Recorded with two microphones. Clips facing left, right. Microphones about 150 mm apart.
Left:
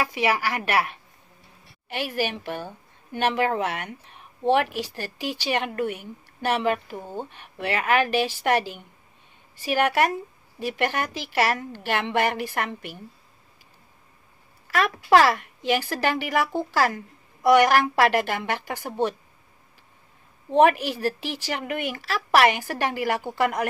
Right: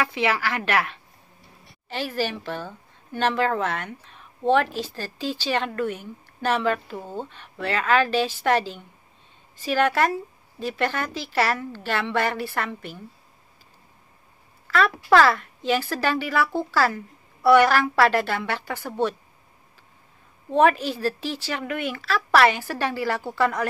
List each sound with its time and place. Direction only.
0.1 s speech: 15° left (ahead or behind)
14.7 s speech: 15° left (ahead or behind)
20.5 s speech: 15° left (ahead or behind)